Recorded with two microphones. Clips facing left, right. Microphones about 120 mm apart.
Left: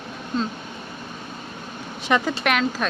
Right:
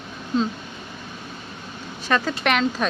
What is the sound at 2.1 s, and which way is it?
Speech, 15° left (ahead or behind).